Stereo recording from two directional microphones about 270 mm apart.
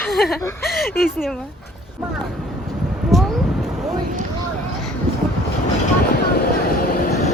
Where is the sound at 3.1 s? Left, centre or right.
Centre.